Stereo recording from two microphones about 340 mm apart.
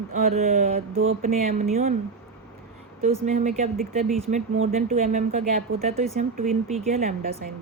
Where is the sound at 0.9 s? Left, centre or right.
Right.